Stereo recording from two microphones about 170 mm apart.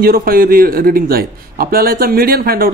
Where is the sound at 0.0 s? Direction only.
60° right (ahead or behind).